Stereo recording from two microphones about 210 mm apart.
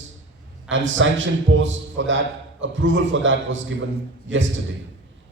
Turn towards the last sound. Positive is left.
turn(degrees=-65)  # may be behind; listen again after turning